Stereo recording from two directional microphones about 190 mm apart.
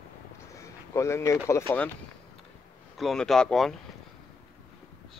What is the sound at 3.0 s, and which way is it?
Speech, centre (ahead or behind).